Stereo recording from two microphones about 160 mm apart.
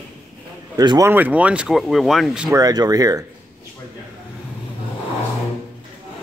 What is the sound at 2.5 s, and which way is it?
Speech, 25° right (ahead or behind).